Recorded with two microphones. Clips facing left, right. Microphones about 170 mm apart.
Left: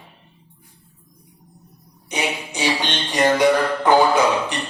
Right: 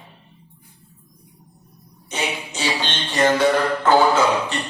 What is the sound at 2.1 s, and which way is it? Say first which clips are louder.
Music: left 2 dB; 15° left (ahead or behind).